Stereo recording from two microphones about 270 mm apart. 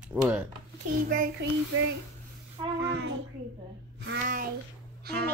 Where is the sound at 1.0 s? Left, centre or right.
Right.